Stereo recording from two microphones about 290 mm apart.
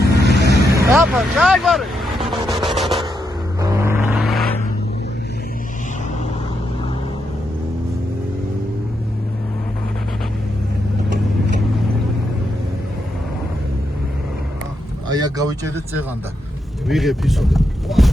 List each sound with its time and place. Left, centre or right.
0.3 s vehicle: left
0.7 s vehicle: centre
2.7 s a sound: centre
3.6 s vehicle: centre
15.0 s speech: centre